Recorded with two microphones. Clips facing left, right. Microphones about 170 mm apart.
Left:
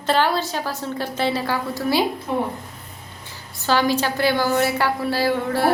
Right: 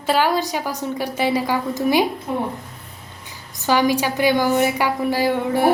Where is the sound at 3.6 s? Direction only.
15° right (ahead or behind).